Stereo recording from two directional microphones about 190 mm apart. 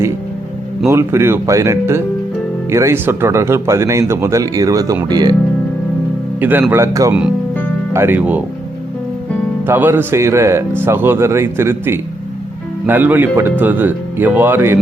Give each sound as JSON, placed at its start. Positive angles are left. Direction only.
{"t": 0.9, "sound": "speech", "side_deg": -15}
{"t": 6.4, "sound": "speech", "side_deg": -10}
{"t": 9.6, "sound": "speech", "side_deg": -10}